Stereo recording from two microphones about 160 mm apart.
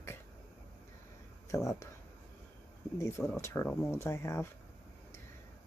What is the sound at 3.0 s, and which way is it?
Speech, 15° left (ahead or behind).